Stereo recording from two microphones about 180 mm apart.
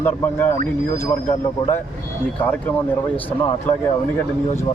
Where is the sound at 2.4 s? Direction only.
10° left (ahead or behind).